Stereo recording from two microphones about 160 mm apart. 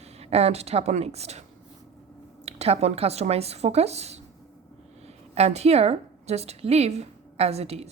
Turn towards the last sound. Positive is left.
turn(degrees=-40)  # may be behind; listen again after turning